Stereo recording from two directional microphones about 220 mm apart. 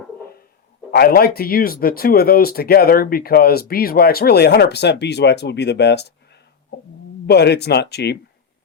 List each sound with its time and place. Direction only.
0.9 s speech: 45° left (ahead or behind)
7.3 s speech: 50° left (ahead or behind)